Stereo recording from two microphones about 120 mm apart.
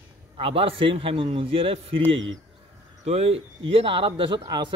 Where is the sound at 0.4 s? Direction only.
50° right (ahead or behind).